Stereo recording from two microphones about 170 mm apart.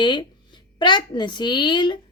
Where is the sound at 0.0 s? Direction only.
25° left (ahead or behind).